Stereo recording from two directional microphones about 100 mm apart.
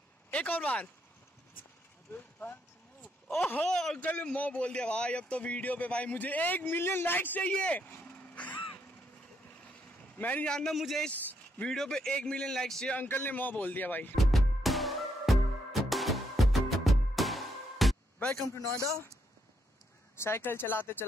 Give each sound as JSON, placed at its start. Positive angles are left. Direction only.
{"t": 0.3, "sound": "speech", "side_deg": 15}
{"t": 3.3, "sound": "a man's voice", "side_deg": 20}
{"t": 11.1, "sound": "speech", "side_deg": 10}
{"t": 12.9, "sound": "speech", "side_deg": 20}
{"t": 14.1, "sound": "music", "side_deg": 0}
{"t": 18.8, "sound": "speech", "side_deg": -30}
{"t": 20.2, "sound": "speech", "side_deg": 25}